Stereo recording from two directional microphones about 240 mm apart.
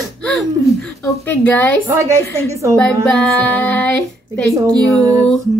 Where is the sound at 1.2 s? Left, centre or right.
Centre.